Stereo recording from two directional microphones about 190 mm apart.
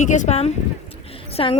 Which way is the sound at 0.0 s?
40° left (ahead or behind).